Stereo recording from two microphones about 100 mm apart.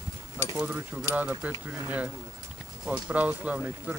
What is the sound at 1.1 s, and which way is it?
Speech, 15° right (ahead or behind).